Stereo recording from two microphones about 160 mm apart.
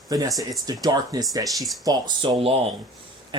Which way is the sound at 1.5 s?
Centre (ahead or behind).